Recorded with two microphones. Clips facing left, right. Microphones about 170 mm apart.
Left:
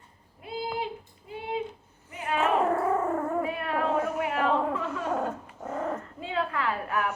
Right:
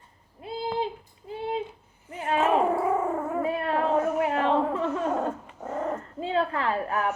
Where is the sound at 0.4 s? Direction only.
30° right (ahead or behind).